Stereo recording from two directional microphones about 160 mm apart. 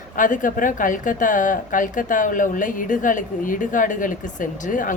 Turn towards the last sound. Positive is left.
turn(degrees=55)  # may be behind; listen again after turning